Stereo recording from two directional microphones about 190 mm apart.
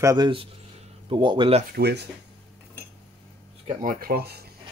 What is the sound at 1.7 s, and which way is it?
Speech, 60° right (ahead or behind).